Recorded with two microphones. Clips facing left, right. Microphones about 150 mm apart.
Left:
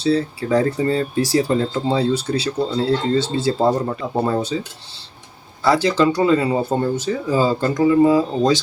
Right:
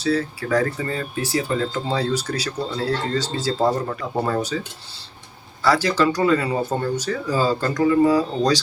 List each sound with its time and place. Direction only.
0.0 s speech: 25° left (ahead or behind)
5.6 s speech: 20° left (ahead or behind)